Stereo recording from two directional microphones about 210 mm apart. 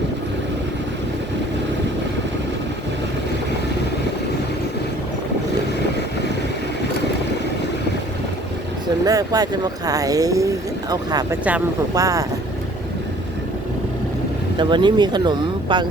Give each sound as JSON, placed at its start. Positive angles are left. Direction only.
{"t": 9.0, "sound": "speech", "side_deg": -15}
{"t": 14.5, "sound": "speech", "side_deg": -20}